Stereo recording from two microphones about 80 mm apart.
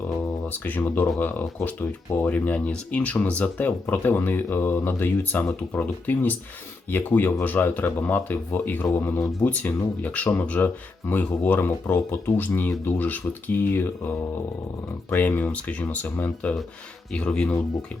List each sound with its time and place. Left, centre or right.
0.4 s speech: left
9.5 s speech: centre
15.1 s speech: left